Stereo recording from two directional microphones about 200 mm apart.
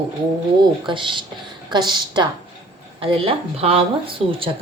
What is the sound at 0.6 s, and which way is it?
A woman's voice, 25° right (ahead or behind).